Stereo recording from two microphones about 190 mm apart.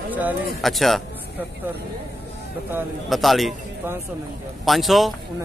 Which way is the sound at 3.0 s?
Centre (ahead or behind).